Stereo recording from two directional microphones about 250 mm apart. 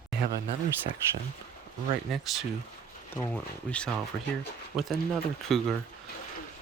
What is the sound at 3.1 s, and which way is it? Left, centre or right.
Speech, centre.